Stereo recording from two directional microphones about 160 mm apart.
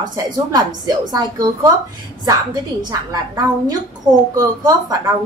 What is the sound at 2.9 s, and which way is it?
A woman's voice, 25° right (ahead or behind).